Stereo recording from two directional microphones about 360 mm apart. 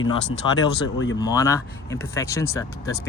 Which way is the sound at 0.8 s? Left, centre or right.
Left.